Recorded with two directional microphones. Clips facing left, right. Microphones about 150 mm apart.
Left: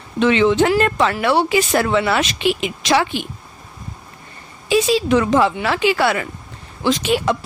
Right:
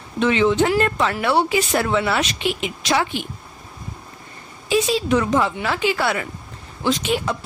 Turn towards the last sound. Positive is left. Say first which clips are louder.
# left 3 dB
turn(degrees=90)